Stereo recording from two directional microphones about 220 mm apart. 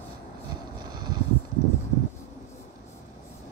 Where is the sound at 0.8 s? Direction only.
20° right (ahead or behind).